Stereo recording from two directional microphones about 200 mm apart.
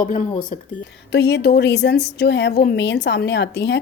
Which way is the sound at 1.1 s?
55° left (ahead or behind).